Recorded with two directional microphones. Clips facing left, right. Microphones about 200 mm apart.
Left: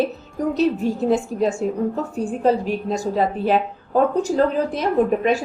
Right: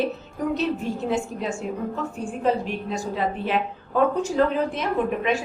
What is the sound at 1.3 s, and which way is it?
A woman's voice, 35° left (ahead or behind).